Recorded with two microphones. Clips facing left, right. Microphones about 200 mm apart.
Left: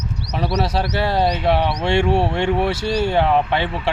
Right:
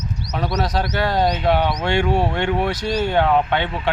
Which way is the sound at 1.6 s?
30° left (ahead or behind).